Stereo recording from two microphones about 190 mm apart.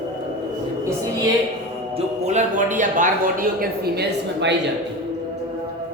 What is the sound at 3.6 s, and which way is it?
Speech, 55° right (ahead or behind).